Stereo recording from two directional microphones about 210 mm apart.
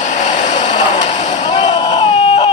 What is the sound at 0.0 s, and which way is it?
Vehicle, 35° left (ahead or behind).